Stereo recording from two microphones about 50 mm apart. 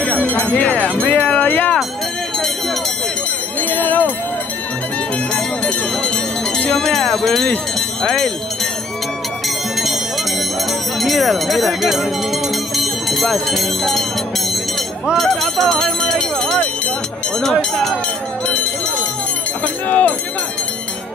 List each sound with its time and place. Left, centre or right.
0.0 s jingle bell: left
3.6 s bell: left
5.3 s bell: centre
6.8 s speech: centre
11.0 s speech: centre
15.1 s a sound: centre
17.4 s speech: centre
19.6 s speech: left